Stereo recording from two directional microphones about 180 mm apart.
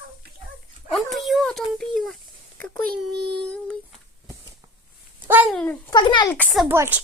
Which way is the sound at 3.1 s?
75° right (ahead or behind).